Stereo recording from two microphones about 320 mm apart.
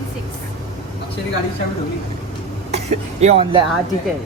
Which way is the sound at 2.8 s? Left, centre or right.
Centre.